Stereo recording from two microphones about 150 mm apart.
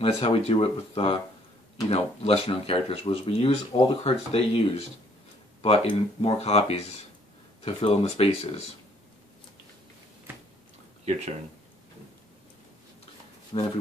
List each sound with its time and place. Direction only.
0.0 s speech: 40° left (ahead or behind)
13.5 s speech: 40° left (ahead or behind)